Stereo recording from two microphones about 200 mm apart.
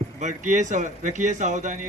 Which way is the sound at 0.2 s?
35° right (ahead or behind).